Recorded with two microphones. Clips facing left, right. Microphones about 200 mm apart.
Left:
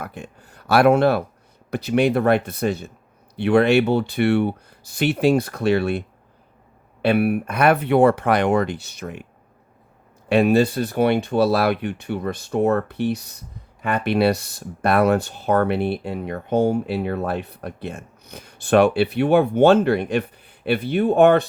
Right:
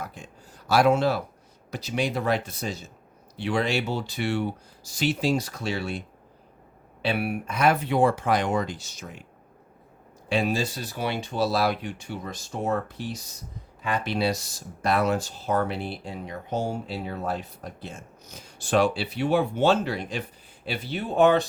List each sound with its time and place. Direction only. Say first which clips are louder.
0.0 s speech: left 4 dB; 60° left (ahead or behind)
7.0 s speech: left 9 dB; 55° left (ahead or behind)
10.2 s speech: left 9 dB; 60° left (ahead or behind)